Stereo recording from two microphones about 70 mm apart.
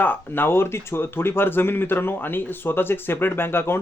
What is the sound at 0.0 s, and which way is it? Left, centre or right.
Speech, left.